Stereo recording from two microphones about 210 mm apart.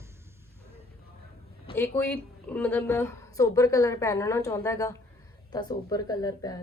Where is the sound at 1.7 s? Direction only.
10° left (ahead or behind).